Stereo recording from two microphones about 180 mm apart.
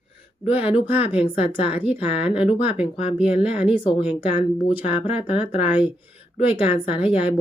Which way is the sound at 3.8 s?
30° left (ahead or behind).